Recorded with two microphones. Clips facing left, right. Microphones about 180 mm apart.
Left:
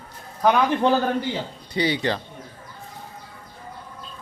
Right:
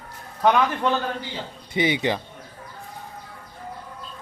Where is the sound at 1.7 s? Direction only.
20° right (ahead or behind).